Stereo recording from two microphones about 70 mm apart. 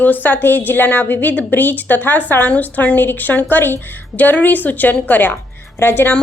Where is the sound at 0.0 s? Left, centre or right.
Left.